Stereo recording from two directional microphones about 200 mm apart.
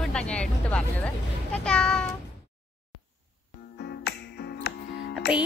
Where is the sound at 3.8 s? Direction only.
55° left (ahead or behind).